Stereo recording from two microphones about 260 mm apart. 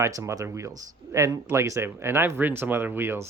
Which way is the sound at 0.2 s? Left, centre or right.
Centre.